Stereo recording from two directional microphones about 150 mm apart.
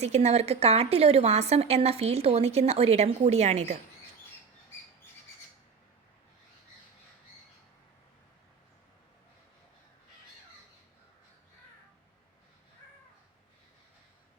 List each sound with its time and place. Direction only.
0.0 s a woman's voice: 45° right (ahead or behind)